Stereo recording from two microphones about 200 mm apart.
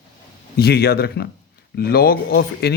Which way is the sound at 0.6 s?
50° left (ahead or behind).